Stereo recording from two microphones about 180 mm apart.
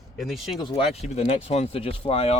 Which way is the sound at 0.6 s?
30° left (ahead or behind).